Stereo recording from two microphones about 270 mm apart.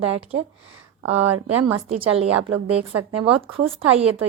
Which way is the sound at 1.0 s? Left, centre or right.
Right.